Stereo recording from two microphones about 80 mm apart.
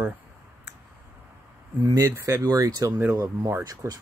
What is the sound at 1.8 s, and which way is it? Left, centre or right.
Speech, right.